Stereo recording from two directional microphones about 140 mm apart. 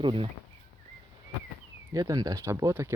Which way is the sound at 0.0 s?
40° right (ahead or behind).